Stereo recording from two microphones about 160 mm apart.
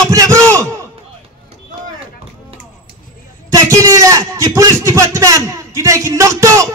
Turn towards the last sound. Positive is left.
turn(degrees=-20)  # may be behind; listen again after turning